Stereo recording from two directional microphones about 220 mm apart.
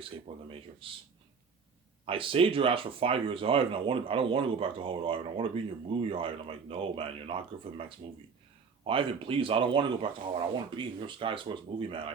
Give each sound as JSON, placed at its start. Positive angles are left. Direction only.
{"t": 0.0, "sound": "speech", "side_deg": -25}
{"t": 2.0, "sound": "speech", "side_deg": -25}